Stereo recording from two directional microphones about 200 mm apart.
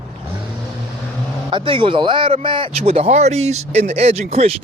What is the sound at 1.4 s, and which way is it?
A man's voice, 25° right (ahead or behind).